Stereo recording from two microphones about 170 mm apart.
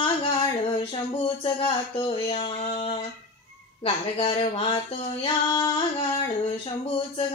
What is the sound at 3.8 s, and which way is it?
Speech, 35° left (ahead or behind).